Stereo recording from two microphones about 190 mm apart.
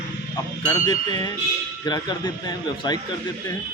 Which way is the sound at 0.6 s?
20° left (ahead or behind).